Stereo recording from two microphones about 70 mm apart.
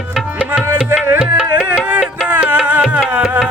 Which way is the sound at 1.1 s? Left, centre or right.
Centre.